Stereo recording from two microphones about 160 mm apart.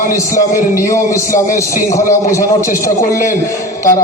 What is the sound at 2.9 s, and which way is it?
Speech, 55° left (ahead or behind).